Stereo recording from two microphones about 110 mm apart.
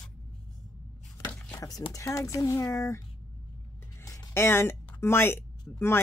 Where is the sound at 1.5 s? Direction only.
30° left (ahead or behind).